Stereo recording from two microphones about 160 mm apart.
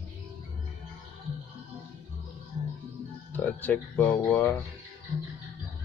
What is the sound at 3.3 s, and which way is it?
Speech, 10° left (ahead or behind).